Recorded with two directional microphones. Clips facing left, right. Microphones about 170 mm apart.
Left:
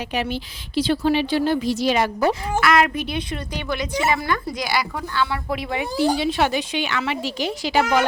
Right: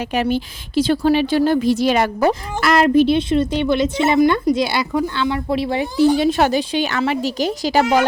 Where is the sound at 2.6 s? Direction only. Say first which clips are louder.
Right 7 dB; 35° right (ahead or behind).